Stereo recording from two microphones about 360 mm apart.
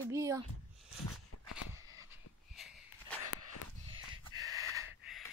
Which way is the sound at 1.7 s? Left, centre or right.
Centre.